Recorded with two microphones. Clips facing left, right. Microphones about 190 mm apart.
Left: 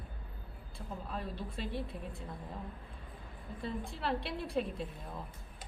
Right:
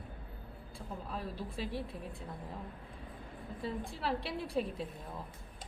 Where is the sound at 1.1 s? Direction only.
5° right (ahead or behind).